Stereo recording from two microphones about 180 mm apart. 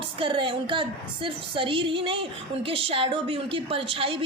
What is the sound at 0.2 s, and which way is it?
Speech, 30° right (ahead or behind).